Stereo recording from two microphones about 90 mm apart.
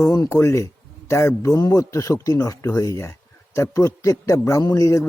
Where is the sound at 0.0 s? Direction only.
40° left (ahead or behind).